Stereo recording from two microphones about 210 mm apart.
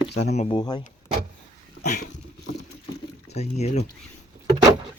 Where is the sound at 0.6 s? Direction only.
20° left (ahead or behind).